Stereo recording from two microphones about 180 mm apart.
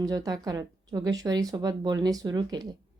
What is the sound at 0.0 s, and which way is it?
Speech, 20° right (ahead or behind).